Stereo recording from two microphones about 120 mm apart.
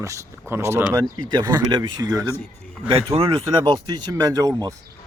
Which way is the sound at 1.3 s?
40° right (ahead or behind).